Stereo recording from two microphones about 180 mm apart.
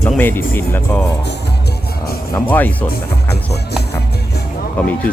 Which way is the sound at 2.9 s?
65° left (ahead or behind).